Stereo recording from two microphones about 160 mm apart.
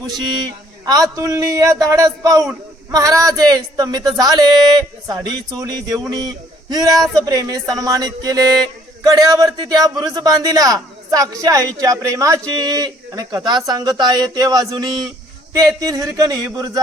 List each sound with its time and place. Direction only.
0.1 s a man's voice: 25° right (ahead or behind)